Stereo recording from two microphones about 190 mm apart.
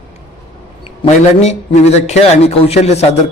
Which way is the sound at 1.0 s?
30° left (ahead or behind).